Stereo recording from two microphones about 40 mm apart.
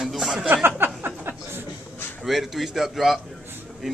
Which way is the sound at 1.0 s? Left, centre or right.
Right.